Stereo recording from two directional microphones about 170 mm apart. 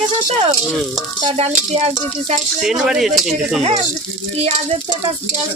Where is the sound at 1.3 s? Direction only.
35° right (ahead or behind).